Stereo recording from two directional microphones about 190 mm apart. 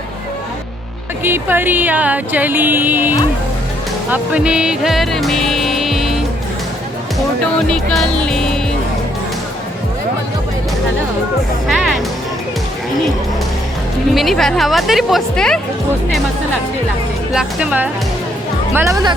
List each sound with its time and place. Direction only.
1.2 s speech: 10° right (ahead or behind)
4.1 s music: 5° right (ahead or behind)
7.7 s music: 5° left (ahead or behind)
14.1 s speech: centre (ahead or behind)
17.3 s speech: 5° right (ahead or behind)